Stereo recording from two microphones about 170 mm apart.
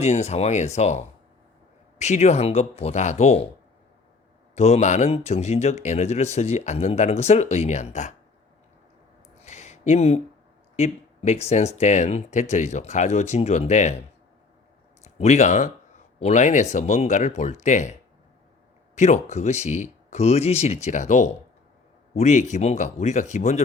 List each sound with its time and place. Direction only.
0.0 s speech: 40° left (ahead or behind)
4.5 s speech: 40° left (ahead or behind)
9.4 s a sound: 40° left (ahead or behind)
10.8 s speech: 40° left (ahead or behind)
15.2 s speech: 40° left (ahead or behind)
18.9 s speech: 40° left (ahead or behind)